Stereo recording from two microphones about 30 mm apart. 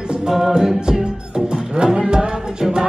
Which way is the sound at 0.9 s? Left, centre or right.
Right.